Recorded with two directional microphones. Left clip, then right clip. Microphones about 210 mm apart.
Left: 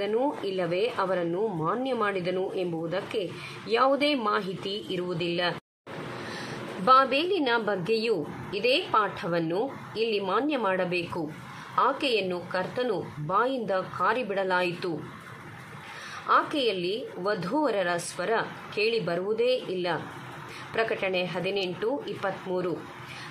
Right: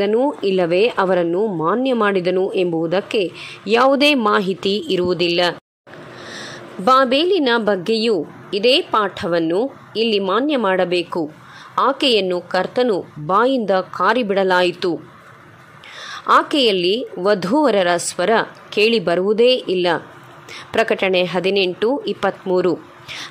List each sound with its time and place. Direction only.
0.0 s speech: 40° right (ahead or behind)
16.1 s a woman's voice: 45° right (ahead or behind)